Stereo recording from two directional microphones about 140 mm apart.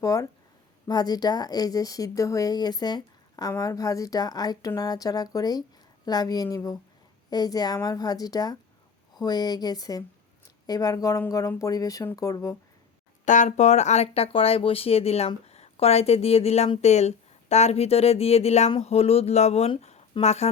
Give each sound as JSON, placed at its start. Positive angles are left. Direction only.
{"t": 0.0, "sound": "speech", "side_deg": 25}
{"t": 13.2, "sound": "speech", "side_deg": 60}